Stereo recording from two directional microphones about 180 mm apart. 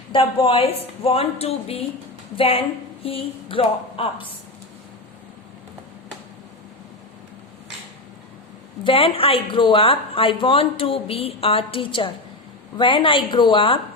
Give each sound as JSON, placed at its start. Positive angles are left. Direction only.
{"t": 0.1, "sound": "speech", "side_deg": 30}
{"t": 8.8, "sound": "a woman's voice", "side_deg": 30}